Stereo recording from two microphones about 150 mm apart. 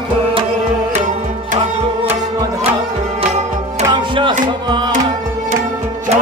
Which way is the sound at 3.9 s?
30° right (ahead or behind).